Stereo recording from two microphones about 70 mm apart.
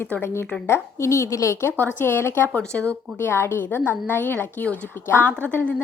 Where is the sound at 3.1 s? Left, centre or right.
Left.